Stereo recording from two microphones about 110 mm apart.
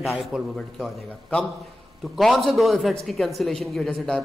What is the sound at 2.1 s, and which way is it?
A man's voice, centre (ahead or behind).